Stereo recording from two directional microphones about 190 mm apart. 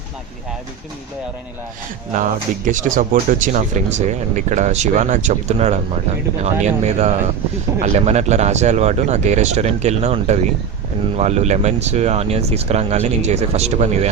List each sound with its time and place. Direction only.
2.6 s speech: 45° right (ahead or behind)